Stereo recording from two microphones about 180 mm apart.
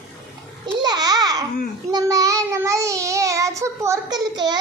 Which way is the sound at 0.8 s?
20° right (ahead or behind).